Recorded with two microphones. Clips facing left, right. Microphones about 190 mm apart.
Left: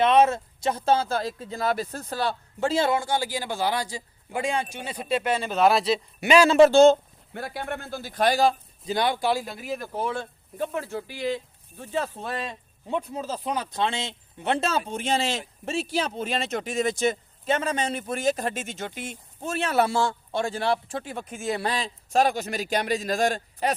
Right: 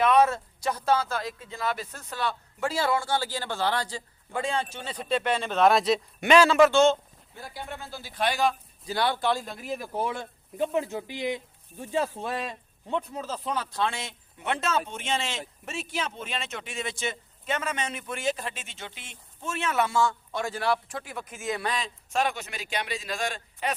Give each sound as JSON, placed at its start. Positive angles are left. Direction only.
{"t": 0.0, "sound": "speech", "side_deg": 25}
{"t": 6.5, "sound": "speech", "side_deg": 30}
{"t": 7.3, "sound": "speech", "side_deg": 70}
{"t": 8.9, "sound": "speech", "side_deg": 15}
{"t": 9.8, "sound": "speech", "side_deg": -15}
{"t": 13.2, "sound": "speech", "side_deg": 10}